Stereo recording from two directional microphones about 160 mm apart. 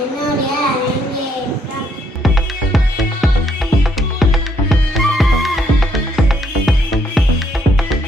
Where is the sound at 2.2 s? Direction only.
Centre (ahead or behind).